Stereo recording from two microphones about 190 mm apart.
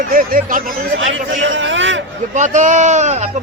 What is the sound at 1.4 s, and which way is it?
Speech, 80° right.